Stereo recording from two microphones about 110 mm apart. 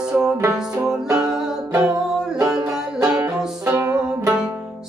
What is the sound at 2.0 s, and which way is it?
Music, 5° right (ahead or behind).